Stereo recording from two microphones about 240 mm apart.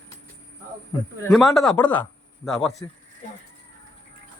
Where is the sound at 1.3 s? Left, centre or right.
Centre.